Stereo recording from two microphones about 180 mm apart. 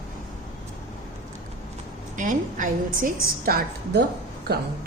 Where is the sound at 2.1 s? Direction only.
45° right (ahead or behind); by 4.9 s 60° right (ahead or behind).